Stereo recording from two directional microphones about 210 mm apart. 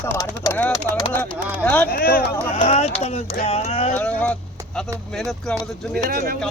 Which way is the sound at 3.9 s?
5° left (ahead or behind).